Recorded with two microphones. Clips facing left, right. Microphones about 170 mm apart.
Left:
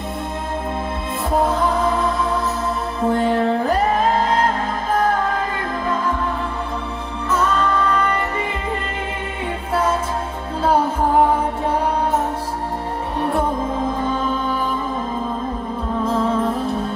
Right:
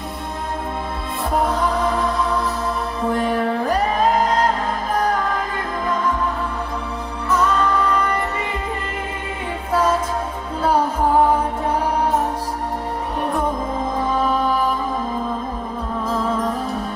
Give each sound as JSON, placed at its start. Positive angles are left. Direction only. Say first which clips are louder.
{"t": 3.1, "sound": "music", "louder": "left 3 dB", "side_deg": 25}